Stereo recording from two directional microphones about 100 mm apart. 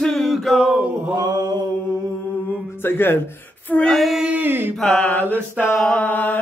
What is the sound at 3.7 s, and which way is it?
Female singing, 10° left (ahead or behind).